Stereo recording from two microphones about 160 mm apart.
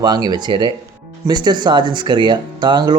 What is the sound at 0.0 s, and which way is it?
Speech, 25° right (ahead or behind).